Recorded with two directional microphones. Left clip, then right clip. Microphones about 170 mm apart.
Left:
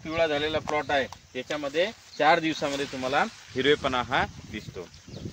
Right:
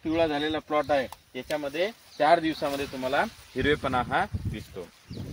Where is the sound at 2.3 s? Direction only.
40° left (ahead or behind).